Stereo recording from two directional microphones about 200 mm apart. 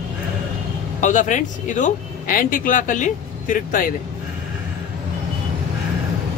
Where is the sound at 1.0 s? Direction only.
40° left (ahead or behind).